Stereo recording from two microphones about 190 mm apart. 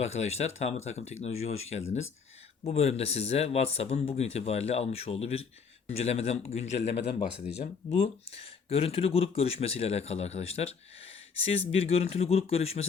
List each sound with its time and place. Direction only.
0.0 s speech: 35° left (ahead or behind)